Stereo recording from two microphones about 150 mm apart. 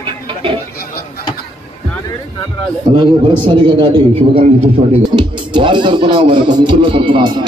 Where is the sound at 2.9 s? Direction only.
30° right (ahead or behind).